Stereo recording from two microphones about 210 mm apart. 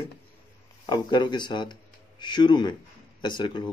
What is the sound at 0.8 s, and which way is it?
Speech, 20° left (ahead or behind).